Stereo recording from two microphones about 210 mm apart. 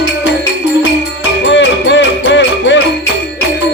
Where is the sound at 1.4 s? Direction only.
60° left (ahead or behind).